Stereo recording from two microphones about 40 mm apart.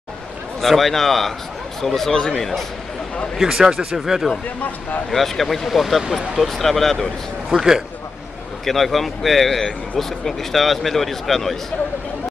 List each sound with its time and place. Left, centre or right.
0.6 s speech: centre
3.3 s speech: centre
4.0 s speech: centre
7.5 s speech: right
8.6 s speech: centre
9.6 s speech: centre
10.0 s speech: centre